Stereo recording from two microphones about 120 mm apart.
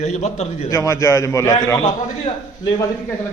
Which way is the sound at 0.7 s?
25° left (ahead or behind).